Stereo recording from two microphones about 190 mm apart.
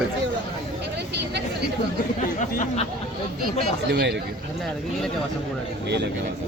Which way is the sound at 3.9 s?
60° right (ahead or behind).